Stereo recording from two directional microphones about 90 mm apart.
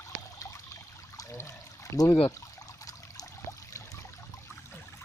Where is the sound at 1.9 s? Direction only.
35° left (ahead or behind).